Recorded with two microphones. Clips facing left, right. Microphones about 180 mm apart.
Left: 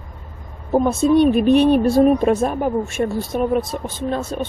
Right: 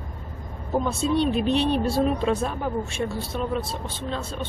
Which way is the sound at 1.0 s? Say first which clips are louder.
Left 9 dB; 45° left (ahead or behind).